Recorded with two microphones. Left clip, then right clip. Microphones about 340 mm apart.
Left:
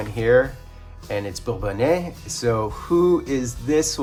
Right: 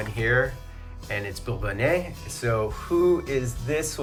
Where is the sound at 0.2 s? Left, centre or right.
Centre.